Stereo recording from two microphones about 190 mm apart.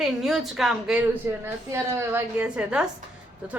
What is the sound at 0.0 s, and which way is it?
A woman's voice, centre (ahead or behind).